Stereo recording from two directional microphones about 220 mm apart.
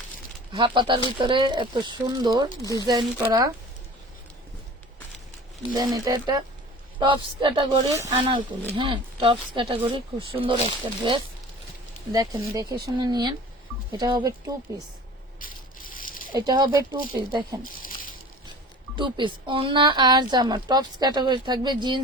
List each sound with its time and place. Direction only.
0.5 s speech: 20° right (ahead or behind)
2.6 s speech: 15° left (ahead or behind)
2.8 s speech: 15° right (ahead or behind)
5.7 s speech: 15° right (ahead or behind)
12.1 s speech: 15° right (ahead or behind)
15.4 s a sound: 40° left (ahead or behind)
16.3 s speech: 20° right (ahead or behind)
18.9 s speech: 20° right (ahead or behind)